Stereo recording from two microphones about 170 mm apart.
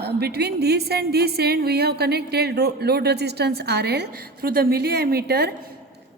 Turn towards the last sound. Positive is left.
turn(degrees=-70)  # may be behind; listen again after turning